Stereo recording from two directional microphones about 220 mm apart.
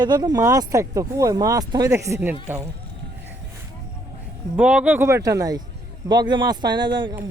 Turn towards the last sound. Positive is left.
turn(degrees=-20)  # may be behind; listen again after turning